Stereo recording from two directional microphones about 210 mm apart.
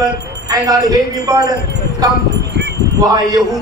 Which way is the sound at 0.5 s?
15° right (ahead or behind).